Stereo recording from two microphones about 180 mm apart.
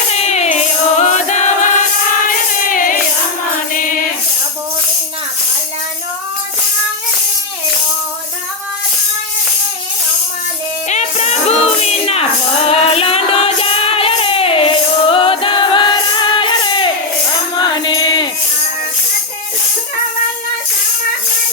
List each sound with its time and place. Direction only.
0.1 s music: 35° left (ahead or behind)
2.3 s choir: 50° left (ahead or behind)
10.8 s music: 40° left (ahead or behind)